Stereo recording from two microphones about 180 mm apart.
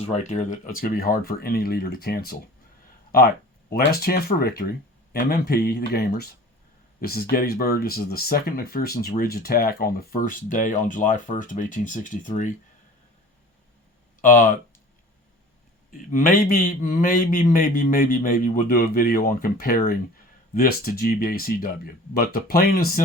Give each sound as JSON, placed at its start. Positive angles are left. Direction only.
{"t": 0.0, "sound": "a man's voice", "side_deg": 40}
{"t": 3.7, "sound": "speech", "side_deg": 55}
{"t": 14.2, "sound": "speech", "side_deg": 45}
{"t": 15.9, "sound": "a man's voice", "side_deg": 50}